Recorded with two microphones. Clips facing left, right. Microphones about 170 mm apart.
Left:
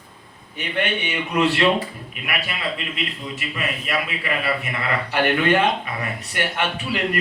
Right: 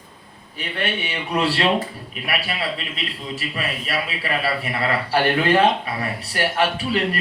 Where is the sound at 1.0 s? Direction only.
35° right (ahead or behind).